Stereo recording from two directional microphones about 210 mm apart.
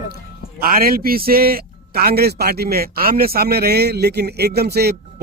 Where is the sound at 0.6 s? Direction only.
45° right (ahead or behind).